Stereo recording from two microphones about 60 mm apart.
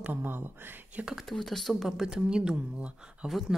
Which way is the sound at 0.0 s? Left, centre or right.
Right.